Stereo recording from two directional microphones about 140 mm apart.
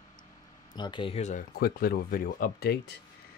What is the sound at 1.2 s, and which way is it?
Speech, 75° left (ahead or behind).